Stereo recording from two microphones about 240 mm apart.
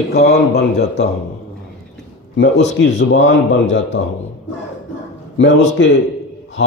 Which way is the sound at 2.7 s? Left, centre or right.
Left.